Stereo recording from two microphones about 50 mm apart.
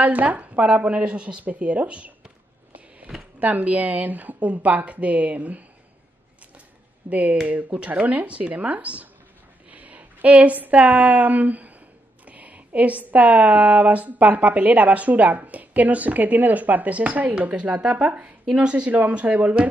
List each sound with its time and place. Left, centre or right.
0.0 s speech: right
3.3 s a woman's voice: right
7.1 s a woman's voice: right
18.9 s a woman's voice: right